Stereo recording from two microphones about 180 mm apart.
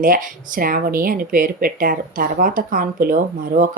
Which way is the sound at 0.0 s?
50° right (ahead or behind).